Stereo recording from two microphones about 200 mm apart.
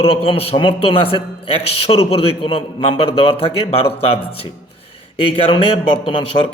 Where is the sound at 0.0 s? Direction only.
30° left (ahead or behind).